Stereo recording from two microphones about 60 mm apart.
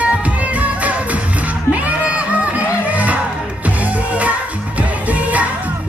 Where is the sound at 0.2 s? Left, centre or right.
Right.